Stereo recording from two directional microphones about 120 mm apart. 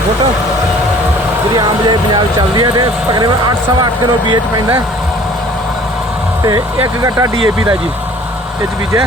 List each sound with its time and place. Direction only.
1.5 s speech: 40° right (ahead or behind)
6.8 s speech: 30° right (ahead or behind)